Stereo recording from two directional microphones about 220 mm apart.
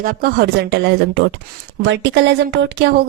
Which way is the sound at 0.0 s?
40° right (ahead or behind).